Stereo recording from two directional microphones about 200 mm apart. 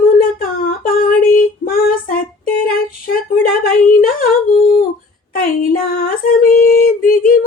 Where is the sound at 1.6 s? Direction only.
45° left (ahead or behind).